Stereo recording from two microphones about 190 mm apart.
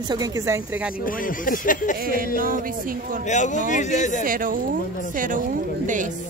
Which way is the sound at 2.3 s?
45° right (ahead or behind).